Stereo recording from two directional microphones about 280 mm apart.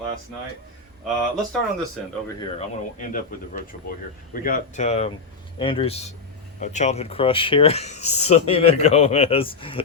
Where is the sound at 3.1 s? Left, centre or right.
Left.